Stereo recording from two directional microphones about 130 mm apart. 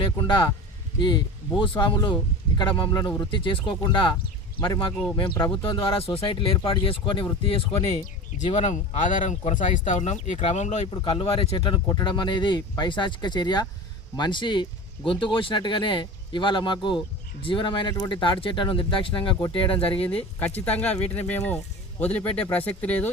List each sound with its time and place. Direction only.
0.0 s speech: 40° left (ahead or behind)
8.6 s speech: 65° left (ahead or behind)
10.9 s speech: 45° left (ahead or behind)
20.0 s speech: 10° left (ahead or behind)